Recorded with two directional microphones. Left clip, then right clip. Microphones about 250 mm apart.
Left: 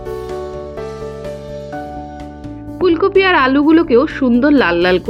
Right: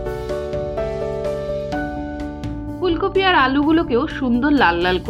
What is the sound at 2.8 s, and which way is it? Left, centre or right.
Speech, centre.